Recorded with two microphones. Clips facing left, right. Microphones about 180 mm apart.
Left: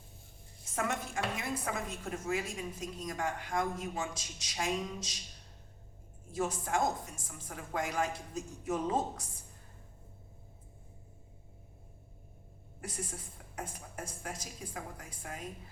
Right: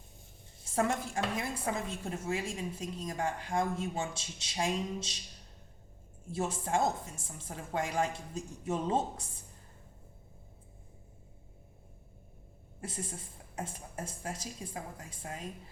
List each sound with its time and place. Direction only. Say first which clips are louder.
0.8 s a woman's voice: right 4 dB; 35° right (ahead or behind)
6.3 s a woman's voice: right 1 dB; 30° right (ahead or behind)
13.6 s a woman's voice: right 2 dB; 25° right (ahead or behind)